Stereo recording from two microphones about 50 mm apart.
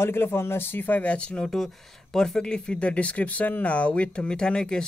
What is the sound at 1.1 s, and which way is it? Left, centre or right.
Speech, left.